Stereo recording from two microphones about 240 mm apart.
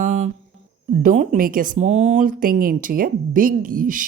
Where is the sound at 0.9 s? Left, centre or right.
Right.